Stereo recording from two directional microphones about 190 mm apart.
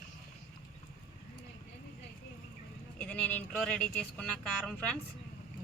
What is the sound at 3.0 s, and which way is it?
Speech, 10° left (ahead or behind).